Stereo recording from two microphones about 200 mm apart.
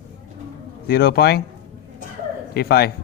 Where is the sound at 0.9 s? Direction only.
50° left (ahead or behind).